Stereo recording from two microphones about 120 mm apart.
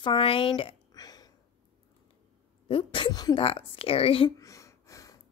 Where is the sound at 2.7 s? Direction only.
45° left (ahead or behind).